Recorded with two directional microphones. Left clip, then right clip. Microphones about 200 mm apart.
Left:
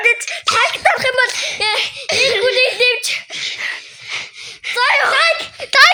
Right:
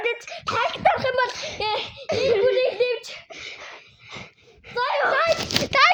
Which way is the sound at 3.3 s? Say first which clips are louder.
Left 13 dB; 10° right (ahead or behind).